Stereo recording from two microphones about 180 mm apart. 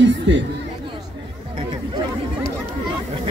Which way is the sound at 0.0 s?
85° right.